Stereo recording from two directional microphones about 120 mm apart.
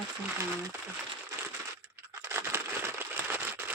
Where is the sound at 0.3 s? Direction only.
25° right (ahead or behind).